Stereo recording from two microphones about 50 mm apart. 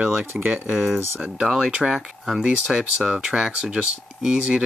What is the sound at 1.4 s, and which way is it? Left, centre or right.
Speech, centre.